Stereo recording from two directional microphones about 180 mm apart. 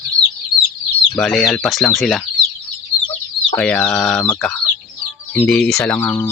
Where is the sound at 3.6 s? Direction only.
5° left (ahead or behind).